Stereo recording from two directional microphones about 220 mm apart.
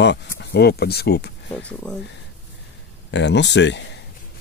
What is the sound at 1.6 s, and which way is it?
Speech, 5° left (ahead or behind).